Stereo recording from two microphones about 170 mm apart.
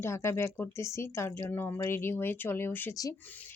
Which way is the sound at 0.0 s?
15° left (ahead or behind).